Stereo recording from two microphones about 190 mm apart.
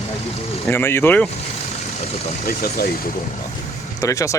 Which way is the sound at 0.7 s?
10° left (ahead or behind).